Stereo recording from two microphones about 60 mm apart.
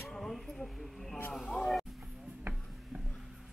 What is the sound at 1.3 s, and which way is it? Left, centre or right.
Speech, centre.